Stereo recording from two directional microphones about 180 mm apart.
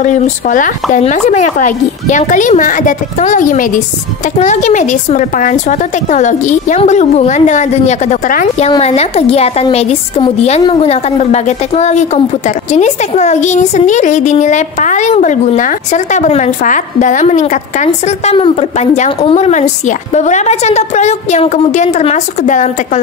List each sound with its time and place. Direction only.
0.0 s a woman's voice: 45° left (ahead or behind)